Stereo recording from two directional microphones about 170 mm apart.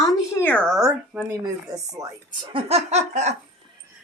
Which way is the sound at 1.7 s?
25° right (ahead or behind).